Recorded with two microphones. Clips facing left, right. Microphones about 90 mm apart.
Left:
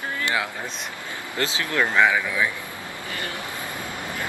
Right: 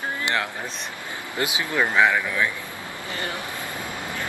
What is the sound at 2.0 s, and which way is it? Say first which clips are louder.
Speech: even; centre (ahead or behind).